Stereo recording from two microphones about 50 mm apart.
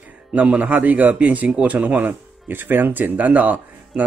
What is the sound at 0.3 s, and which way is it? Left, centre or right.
Speech, right.